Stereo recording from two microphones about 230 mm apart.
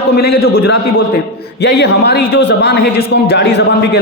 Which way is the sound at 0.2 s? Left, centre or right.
Left.